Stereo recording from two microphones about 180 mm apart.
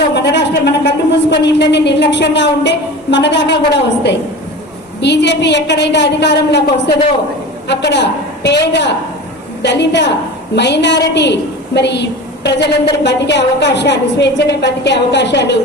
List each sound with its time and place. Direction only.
0.1 s a woman's voice: 75° left (ahead or behind)
9.6 s a woman's voice: 75° left (ahead or behind)